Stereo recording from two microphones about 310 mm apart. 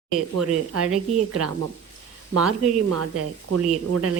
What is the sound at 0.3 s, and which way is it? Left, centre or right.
Speech, right.